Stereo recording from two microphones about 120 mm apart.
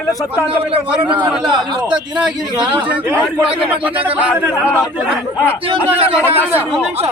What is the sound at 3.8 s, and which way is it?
Speech, 10° right (ahead or behind).